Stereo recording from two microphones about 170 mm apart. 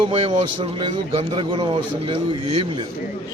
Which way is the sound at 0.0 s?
30° right (ahead or behind).